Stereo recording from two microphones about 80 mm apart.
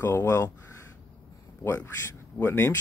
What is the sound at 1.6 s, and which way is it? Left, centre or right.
A man's voice, left.